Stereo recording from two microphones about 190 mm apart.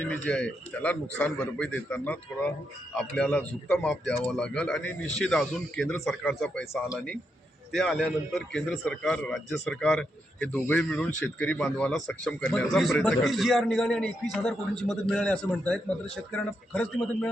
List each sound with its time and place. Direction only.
0.1 s a man's voice: 5° left (ahead or behind)